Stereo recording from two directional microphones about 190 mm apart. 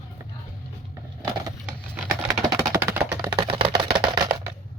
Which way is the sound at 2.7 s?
15° right (ahead or behind).